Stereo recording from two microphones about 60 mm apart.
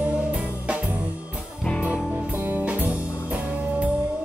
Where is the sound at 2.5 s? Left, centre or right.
Right.